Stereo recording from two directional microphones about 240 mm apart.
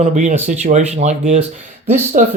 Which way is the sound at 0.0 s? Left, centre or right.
Right.